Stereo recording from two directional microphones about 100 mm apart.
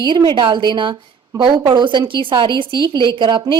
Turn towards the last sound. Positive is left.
turn(degrees=-55)  # may be behind; listen again after turning